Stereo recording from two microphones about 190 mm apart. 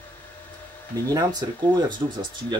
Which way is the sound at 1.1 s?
20° right (ahead or behind).